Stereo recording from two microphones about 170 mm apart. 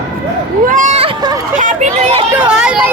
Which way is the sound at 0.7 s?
50° right (ahead or behind).